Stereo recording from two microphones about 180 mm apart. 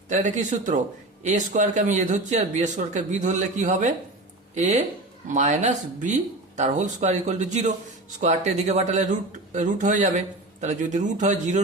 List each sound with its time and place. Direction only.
0.1 s speech: 40° right (ahead or behind)